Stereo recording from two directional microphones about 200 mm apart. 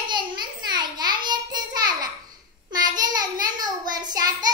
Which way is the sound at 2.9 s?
20° right (ahead or behind).